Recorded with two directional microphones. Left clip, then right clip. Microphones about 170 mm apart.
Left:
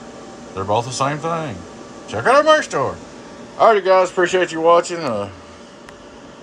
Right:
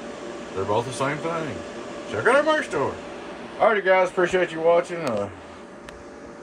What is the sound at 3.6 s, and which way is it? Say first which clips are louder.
Speech: left 6 dB; 5° left (ahead or behind).